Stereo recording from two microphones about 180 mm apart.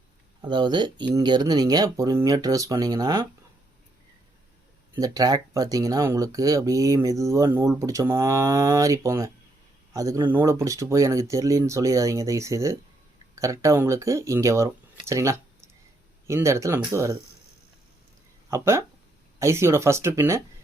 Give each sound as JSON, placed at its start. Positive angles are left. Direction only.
{"t": 0.4, "sound": "speech", "side_deg": -25}
{"t": 4.9, "sound": "speech", "side_deg": -20}
{"t": 18.5, "sound": "speech", "side_deg": -15}